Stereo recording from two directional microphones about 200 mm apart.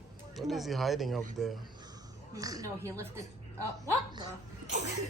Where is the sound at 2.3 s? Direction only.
20° right (ahead or behind).